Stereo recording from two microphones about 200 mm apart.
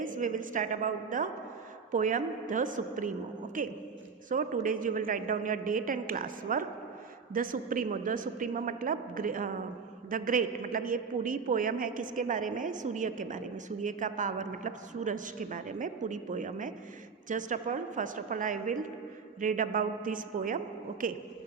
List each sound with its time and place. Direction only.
0.0 s a woman's voice: 40° right (ahead or behind)